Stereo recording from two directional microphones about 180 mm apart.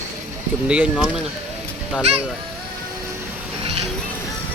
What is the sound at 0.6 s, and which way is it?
Speech, 5° right (ahead or behind).